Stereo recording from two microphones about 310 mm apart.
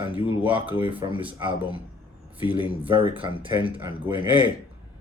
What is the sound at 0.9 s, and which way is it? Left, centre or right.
Speech, centre.